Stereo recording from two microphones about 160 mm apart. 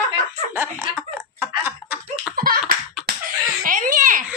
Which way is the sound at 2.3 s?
65° right (ahead or behind).